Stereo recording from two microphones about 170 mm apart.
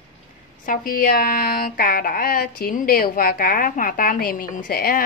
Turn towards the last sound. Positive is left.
turn(degrees=60)  # may be behind; listen again after turning